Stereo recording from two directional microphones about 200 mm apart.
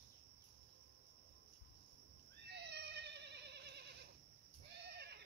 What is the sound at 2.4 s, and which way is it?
Cat, 55° right (ahead or behind).